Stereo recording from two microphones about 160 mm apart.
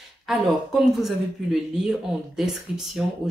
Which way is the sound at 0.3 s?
Centre (ahead or behind).